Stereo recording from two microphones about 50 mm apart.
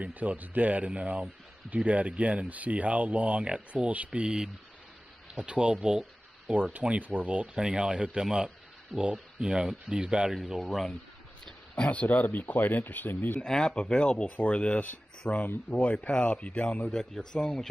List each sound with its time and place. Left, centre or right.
0.0 s speech: right; by 6.5 s centre
6.5 s speech: right; by 10.3 s centre
10.3 s speech: centre
11.7 s speech: left
13.4 s speech: centre
14.8 s speech: left
16.1 s speech: centre
16.9 s speech: centre